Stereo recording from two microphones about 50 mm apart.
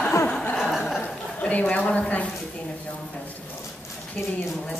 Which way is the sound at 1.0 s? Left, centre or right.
Left.